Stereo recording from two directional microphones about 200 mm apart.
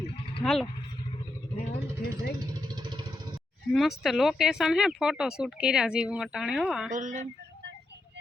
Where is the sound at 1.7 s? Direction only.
55° left (ahead or behind).